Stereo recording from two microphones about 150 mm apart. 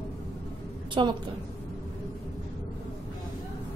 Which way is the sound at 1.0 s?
35° right (ahead or behind).